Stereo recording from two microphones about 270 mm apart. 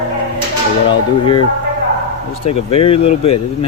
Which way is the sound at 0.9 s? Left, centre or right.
Centre.